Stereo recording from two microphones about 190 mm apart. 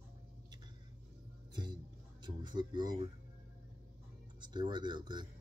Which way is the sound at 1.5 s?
25° right (ahead or behind).